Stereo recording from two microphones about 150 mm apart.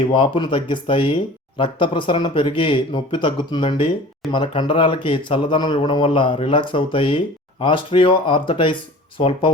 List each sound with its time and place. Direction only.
0.1 s speech: 35° left (ahead or behind)